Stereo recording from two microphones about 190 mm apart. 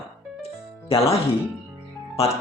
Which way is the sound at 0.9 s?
30° left (ahead or behind).